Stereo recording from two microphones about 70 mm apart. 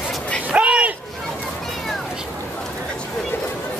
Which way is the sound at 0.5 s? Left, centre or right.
Centre.